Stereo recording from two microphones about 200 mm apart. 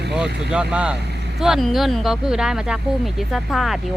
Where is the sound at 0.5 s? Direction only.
5° right (ahead or behind).